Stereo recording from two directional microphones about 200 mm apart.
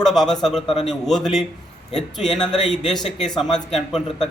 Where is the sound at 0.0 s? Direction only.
Centre (ahead or behind).